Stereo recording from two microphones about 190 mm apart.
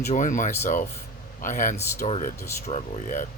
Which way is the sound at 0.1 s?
40° left (ahead or behind).